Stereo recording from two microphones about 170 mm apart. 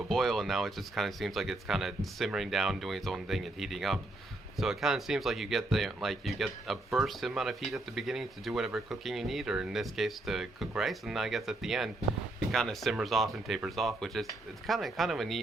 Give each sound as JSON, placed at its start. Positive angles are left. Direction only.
{"t": 0.1, "sound": "speech", "side_deg": 0}